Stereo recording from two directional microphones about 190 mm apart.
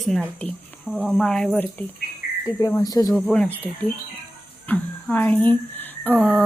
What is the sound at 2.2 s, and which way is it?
Cricket, 45° left (ahead or behind).